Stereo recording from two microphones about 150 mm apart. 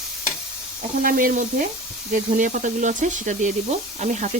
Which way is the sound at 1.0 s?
65° right (ahead or behind).